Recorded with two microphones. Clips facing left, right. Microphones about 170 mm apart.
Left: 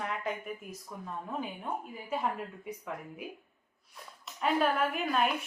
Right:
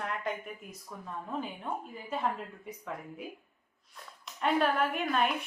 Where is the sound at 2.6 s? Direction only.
10° left (ahead or behind).